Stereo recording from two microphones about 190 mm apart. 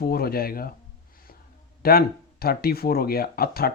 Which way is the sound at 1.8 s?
50° left (ahead or behind).